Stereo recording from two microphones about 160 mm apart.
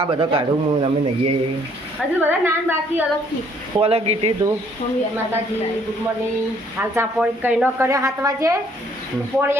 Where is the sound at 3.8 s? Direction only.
40° right (ahead or behind).